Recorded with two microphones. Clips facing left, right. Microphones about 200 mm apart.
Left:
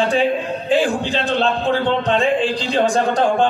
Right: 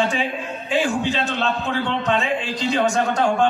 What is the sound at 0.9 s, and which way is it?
A man's voice, 35° left (ahead or behind).